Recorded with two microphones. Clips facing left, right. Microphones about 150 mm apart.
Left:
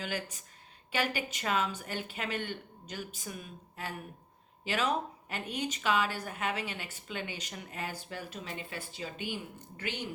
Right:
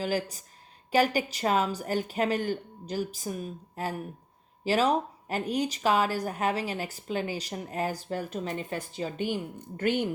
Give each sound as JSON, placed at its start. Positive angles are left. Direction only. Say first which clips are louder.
{"t": 0.0, "sound": "speech", "louder": "right 8 dB", "side_deg": -35}